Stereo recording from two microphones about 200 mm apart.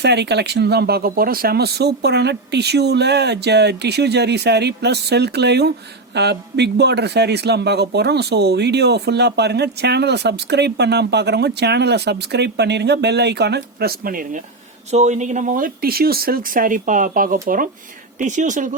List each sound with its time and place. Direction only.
0.0 s a man's voice: 55° right (ahead or behind); by 18.7 s 40° right (ahead or behind)